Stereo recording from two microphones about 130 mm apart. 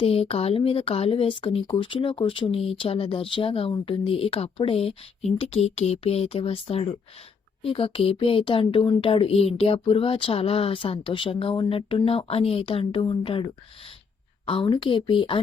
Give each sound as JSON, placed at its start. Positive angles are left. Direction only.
{"t": 0.0, "sound": "speech", "side_deg": 45}
{"t": 14.4, "sound": "speech", "side_deg": 45}